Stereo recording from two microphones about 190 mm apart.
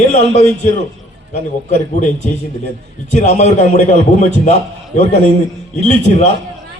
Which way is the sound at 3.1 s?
35° left (ahead or behind).